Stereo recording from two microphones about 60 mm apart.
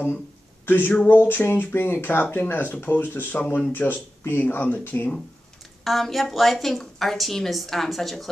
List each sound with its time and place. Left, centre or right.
0.7 s speech: left
5.9 s a woman's voice: centre